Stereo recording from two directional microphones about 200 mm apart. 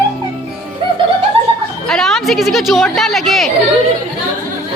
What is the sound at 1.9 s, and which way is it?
A woman's voice, centre (ahead or behind).